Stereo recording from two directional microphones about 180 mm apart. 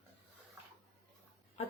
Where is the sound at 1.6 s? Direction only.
35° left (ahead or behind).